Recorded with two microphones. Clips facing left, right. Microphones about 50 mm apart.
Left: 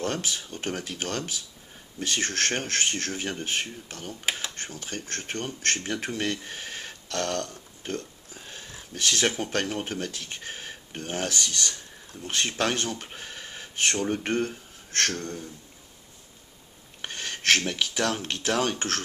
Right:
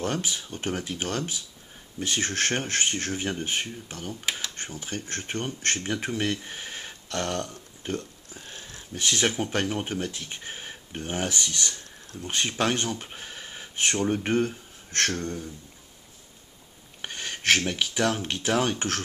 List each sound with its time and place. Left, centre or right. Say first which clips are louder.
0.0 s speech: right 1 dB; centre
8.4 s speech: even; centre
8.9 s speech: even; centre
17.0 s speech: even; centre